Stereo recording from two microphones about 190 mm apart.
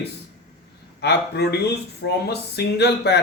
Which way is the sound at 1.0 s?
60° left (ahead or behind).